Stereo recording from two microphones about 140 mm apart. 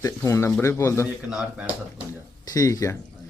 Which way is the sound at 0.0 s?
20° left (ahead or behind).